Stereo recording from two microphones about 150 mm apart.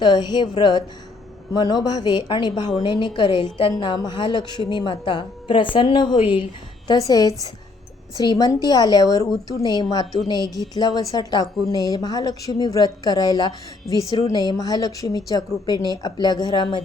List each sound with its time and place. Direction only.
0.0 s a woman's voice: 30° left (ahead or behind)
6.8 s a woman's voice: 25° left (ahead or behind)